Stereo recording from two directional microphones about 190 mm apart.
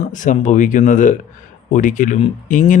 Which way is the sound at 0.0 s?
40° left (ahead or behind).